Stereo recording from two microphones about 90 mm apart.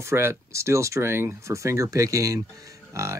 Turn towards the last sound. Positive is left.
turn(degrees=-35)  # may be behind; listen again after turning